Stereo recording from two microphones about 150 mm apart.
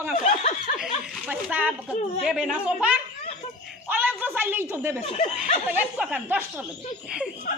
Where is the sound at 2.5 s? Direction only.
10° right (ahead or behind).